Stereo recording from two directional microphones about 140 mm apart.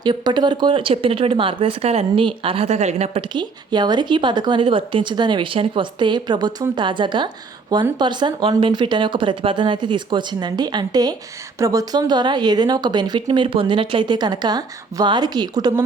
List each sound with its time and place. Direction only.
0.0 s speech: 30° right (ahead or behind); by 3.2 s 50° right (ahead or behind)
3.3 s speech: 30° right (ahead or behind)